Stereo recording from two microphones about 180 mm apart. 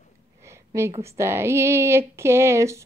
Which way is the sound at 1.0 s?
15° right (ahead or behind).